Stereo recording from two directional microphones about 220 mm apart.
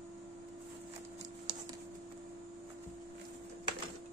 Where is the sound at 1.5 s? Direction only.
20° right (ahead or behind).